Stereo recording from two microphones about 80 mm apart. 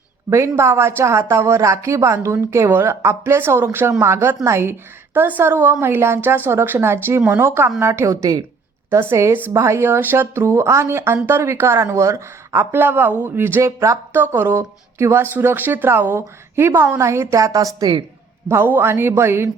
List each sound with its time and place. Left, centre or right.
0.3 s speech: right
8.9 s speech: right
13.6 s speech: right
14.1 s speech: right
17.7 s a woman's voice: right
18.4 s speech: right